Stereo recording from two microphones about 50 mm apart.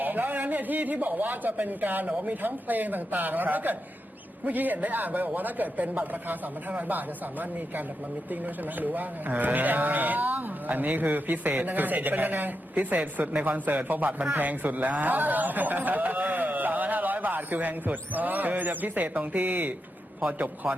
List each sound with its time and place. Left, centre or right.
0.0 s a man's voice: right